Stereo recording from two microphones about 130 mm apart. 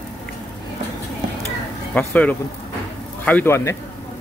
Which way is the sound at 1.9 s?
10° left (ahead or behind).